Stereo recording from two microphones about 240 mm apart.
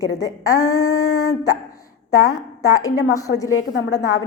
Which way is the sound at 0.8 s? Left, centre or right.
Left.